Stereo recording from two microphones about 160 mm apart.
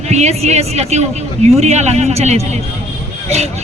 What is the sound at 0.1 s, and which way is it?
A woman's voice, 45° right (ahead or behind).